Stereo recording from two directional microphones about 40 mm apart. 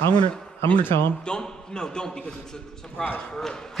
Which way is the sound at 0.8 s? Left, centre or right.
Left.